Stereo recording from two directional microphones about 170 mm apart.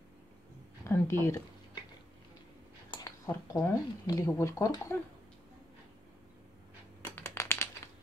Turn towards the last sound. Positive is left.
turn(degrees=15)  # may be behind; listen again after turning